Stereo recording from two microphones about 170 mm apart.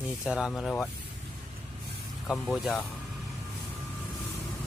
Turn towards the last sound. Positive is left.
turn(degrees=0)  # may be behind; listen again after turning